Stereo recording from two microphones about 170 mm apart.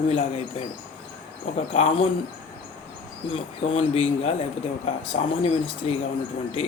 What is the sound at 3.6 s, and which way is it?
Speech, 35° left (ahead or behind).